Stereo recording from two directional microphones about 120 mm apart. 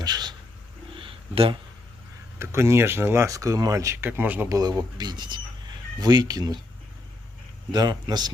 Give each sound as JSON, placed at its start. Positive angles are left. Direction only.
{"t": 0.0, "sound": "cat", "side_deg": -35}
{"t": 0.9, "sound": "a sound", "side_deg": -50}
{"t": 2.4, "sound": "speech", "side_deg": -25}
{"t": 4.5, "sound": "speech", "side_deg": -35}
{"t": 7.7, "sound": "speech", "side_deg": -35}